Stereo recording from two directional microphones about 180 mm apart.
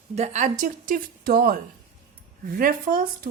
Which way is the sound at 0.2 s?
40° right (ahead or behind).